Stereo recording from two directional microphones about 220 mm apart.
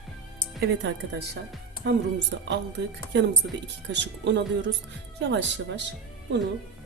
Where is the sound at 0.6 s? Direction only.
55° right (ahead or behind).